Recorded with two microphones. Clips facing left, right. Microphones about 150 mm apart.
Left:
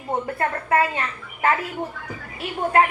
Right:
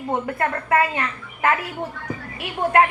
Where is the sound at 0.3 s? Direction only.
25° left (ahead or behind).